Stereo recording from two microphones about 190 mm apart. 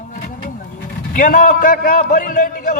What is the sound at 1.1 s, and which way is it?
A man's voice, 45° left (ahead or behind).